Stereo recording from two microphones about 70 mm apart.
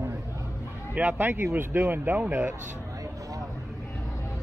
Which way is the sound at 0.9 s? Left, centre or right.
Right.